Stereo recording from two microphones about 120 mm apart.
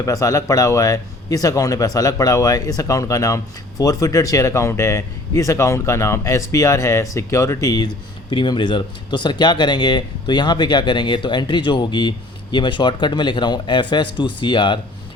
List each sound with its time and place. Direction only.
0.0 s speech: 30° left (ahead or behind)
8.3 s speech: 40° left (ahead or behind)